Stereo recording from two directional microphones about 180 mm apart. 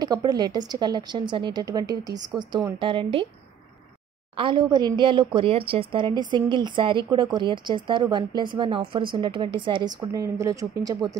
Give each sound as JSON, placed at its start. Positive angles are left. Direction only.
{"t": 0.0, "sound": "speech", "side_deg": -20}
{"t": 4.4, "sound": "speech", "side_deg": -25}